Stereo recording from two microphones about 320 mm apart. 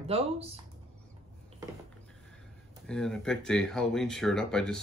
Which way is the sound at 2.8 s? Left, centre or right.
Centre.